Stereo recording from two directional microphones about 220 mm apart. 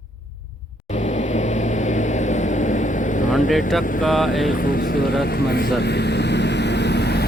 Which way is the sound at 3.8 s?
35° left (ahead or behind).